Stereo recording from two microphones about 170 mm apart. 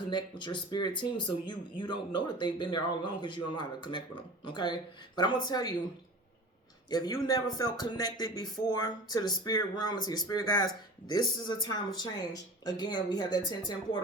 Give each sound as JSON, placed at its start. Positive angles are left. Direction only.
{"t": 0.1, "sound": "speech", "side_deg": 25}
{"t": 6.9, "sound": "speech", "side_deg": 25}